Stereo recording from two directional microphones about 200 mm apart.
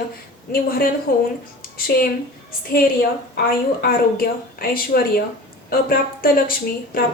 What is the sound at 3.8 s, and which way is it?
A woman's voice, 50° left (ahead or behind).